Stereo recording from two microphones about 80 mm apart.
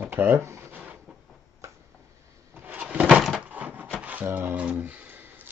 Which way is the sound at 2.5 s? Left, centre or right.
Right.